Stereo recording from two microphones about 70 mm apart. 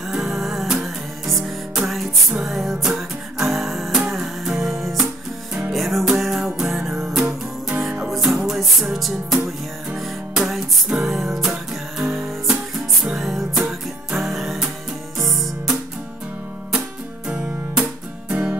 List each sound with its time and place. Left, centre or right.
0.1 s music: centre
17.3 s guitar: centre
18.3 s music: centre